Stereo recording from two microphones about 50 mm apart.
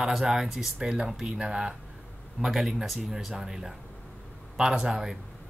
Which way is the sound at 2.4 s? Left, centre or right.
Centre.